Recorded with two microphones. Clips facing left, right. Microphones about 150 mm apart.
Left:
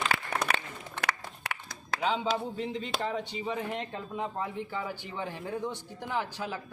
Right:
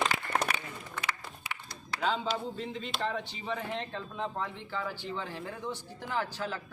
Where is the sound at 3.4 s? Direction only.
15° left (ahead or behind).